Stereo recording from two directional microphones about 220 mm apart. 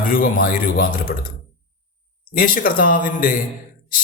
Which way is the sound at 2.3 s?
40° left (ahead or behind).